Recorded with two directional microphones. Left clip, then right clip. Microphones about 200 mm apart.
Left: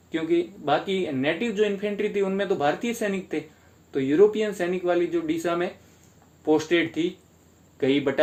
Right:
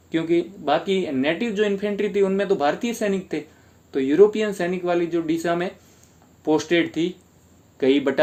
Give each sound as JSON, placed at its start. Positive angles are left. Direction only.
{"t": 0.1, "sound": "speech", "side_deg": -45}